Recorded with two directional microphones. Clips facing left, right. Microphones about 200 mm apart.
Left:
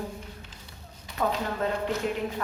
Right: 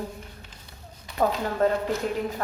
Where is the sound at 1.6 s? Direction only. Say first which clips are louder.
Right 8 dB; 40° right (ahead or behind).